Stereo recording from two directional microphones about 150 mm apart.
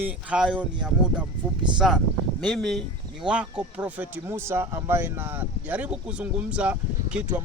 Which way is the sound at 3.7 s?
10° right (ahead or behind).